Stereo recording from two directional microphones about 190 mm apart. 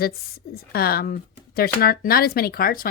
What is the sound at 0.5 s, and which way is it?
Speech, 50° left (ahead or behind).